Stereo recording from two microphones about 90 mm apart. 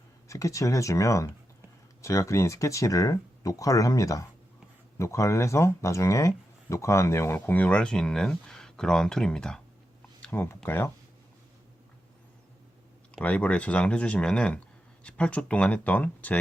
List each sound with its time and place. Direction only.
0.3 s speech: 35° left (ahead or behind); by 9.6 s 10° left (ahead or behind)
10.2 s speech: 20° left (ahead or behind)
13.2 s speech: 15° left (ahead or behind)